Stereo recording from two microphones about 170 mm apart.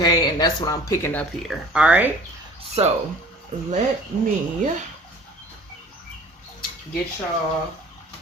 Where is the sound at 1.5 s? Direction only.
5° right (ahead or behind).